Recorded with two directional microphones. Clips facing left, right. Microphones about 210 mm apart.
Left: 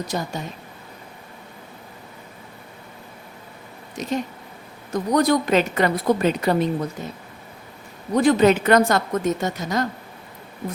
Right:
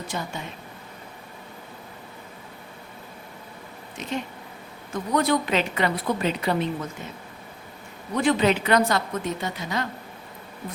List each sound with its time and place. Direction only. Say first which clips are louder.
0.1 s a woman's voice: left 5 dB; 40° left (ahead or behind)
3.9 s a woman's voice: left 5 dB; 40° left (ahead or behind)
8.1 s a woman's voice: left 5 dB; 40° left (ahead or behind)